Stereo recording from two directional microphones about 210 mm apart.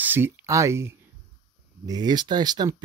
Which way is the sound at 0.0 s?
10° right (ahead or behind).